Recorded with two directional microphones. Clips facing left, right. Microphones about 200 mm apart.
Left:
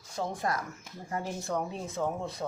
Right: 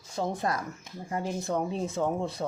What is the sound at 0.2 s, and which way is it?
Speech, 25° right (ahead or behind).